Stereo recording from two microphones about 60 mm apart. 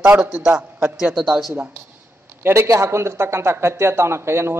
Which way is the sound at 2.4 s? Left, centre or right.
Right.